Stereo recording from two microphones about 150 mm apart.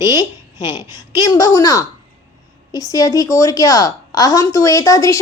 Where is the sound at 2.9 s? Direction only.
25° left (ahead or behind).